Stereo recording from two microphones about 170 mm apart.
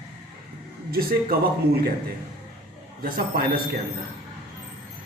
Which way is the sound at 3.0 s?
60° right (ahead or behind).